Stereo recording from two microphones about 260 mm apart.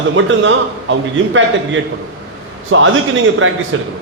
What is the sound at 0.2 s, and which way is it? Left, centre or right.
A man's voice, right.